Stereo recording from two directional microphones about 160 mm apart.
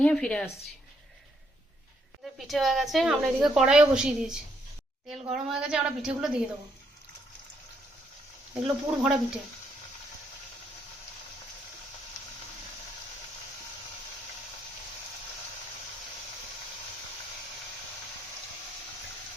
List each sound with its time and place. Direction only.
0.0 s a woman's voice: 5° left (ahead or behind)
2.4 s a woman's voice: centre (ahead or behind)
8.6 s a woman's voice: 5° right (ahead or behind)